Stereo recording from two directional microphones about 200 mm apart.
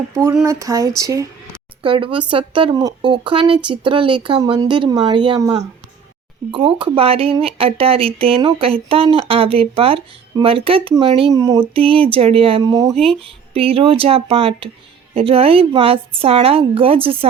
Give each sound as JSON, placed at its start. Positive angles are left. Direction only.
{"t": 0.1, "sound": "speech", "side_deg": -15}
{"t": 12.9, "sound": "speech", "side_deg": 0}
{"t": 13.2, "sound": "speech", "side_deg": -30}